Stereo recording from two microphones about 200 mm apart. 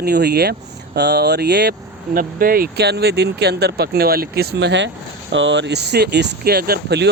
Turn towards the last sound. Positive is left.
turn(degrees=-55)  # may be behind; listen again after turning